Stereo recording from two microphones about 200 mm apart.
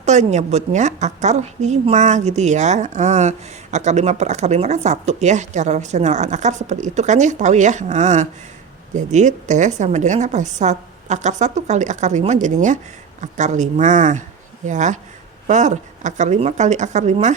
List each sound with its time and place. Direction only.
0.0 s a woman's voice: 35° right (ahead or behind)